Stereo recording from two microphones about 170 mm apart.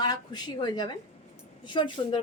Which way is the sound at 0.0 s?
25° left (ahead or behind).